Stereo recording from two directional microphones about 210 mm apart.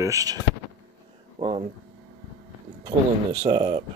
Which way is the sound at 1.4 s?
30° right (ahead or behind).